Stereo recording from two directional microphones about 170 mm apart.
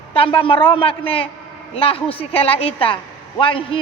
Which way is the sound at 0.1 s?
35° left (ahead or behind).